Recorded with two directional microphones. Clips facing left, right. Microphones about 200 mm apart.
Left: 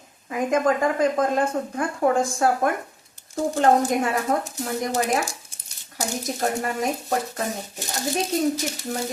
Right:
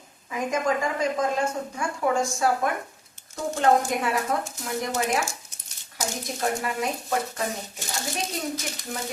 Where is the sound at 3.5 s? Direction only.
35° left (ahead or behind).